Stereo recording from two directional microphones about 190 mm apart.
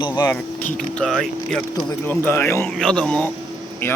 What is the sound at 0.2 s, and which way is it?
Speech, 15° left (ahead or behind).